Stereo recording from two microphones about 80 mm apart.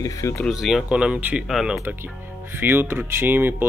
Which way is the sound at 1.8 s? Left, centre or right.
Right.